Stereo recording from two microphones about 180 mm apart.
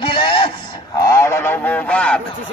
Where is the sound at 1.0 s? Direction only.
15° left (ahead or behind).